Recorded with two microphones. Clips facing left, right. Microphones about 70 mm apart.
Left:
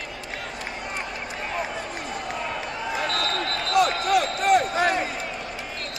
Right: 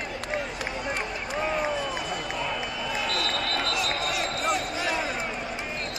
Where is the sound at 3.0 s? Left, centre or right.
Left.